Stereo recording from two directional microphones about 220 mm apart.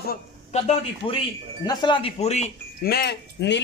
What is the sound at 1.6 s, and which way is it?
Speech, 20° left (ahead or behind).